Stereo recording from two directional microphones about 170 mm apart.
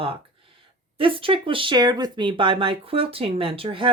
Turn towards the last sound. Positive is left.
turn(degrees=-30)  # may be behind; listen again after turning